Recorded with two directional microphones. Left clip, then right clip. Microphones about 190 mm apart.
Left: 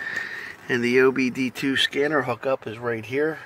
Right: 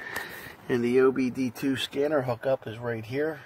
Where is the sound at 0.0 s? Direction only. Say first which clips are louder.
Left 7 dB; 20° right (ahead or behind).